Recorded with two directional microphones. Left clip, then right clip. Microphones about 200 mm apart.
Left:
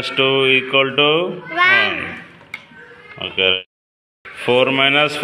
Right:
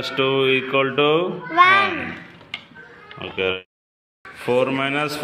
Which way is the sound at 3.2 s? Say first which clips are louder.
Left 7 dB; 5° left (ahead or behind).